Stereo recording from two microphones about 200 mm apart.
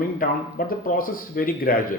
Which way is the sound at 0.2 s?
45° left (ahead or behind).